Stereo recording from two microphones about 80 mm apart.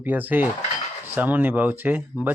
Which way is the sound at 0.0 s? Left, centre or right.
Right.